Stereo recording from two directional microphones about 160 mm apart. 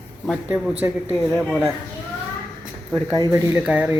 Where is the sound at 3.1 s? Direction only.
25° right (ahead or behind).